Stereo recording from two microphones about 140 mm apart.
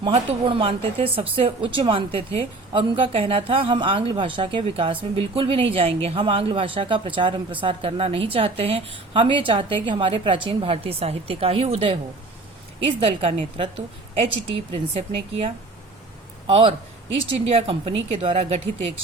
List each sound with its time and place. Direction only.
0.0 s a woman's voice: 40° right (ahead or behind)